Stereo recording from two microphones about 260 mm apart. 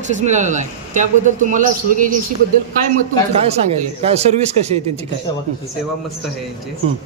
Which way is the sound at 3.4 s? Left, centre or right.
Right.